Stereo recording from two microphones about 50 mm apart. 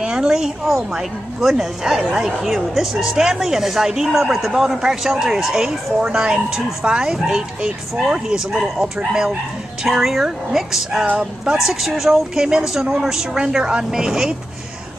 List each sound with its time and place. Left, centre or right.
0.0 s speech: centre